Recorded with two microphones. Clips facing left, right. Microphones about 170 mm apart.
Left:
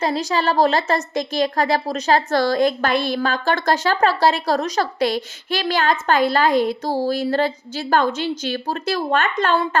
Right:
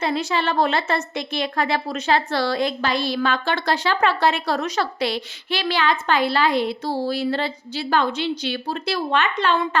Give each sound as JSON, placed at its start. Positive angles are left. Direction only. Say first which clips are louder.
{"t": 0.0, "sound": "a woman's voice", "louder": "left 2 dB", "side_deg": 40}